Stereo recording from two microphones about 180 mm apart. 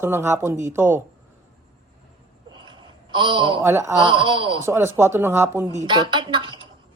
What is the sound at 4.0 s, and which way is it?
Speech, 25° right (ahead or behind).